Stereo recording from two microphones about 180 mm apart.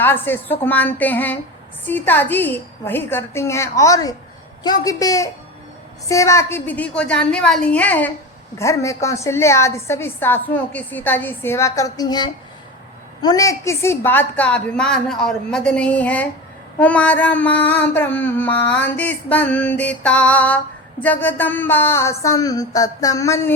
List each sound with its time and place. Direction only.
0.0 s mantra: 10° left (ahead or behind)
4.6 s a woman's voice: 20° left (ahead or behind)
6.1 s mantra: 15° left (ahead or behind)